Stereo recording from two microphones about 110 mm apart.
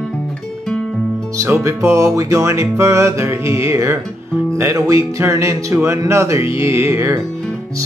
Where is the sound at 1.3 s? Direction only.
25° right (ahead or behind).